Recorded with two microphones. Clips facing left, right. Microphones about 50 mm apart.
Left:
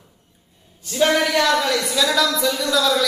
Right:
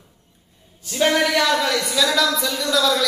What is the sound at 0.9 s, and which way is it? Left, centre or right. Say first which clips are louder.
A man's voice: left 1 dB; centre.